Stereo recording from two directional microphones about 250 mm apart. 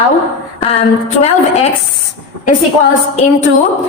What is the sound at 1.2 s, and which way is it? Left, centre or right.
Speech, left.